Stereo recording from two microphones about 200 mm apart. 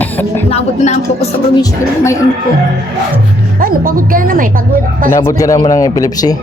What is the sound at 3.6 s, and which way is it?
Speech, 45° right (ahead or behind).